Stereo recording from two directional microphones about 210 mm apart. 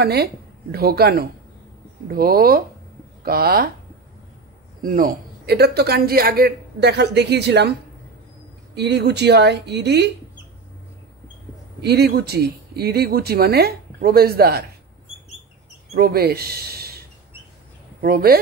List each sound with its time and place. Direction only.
0.0 s a man's voice: 50° right (ahead or behind)
4.8 s a man's voice: 40° right (ahead or behind)
8.7 s a man's voice: 55° right (ahead or behind)
11.8 s a man's voice: 50° right (ahead or behind)
15.9 s speech: 45° right (ahead or behind)
18.0 s a man's voice: 45° right (ahead or behind)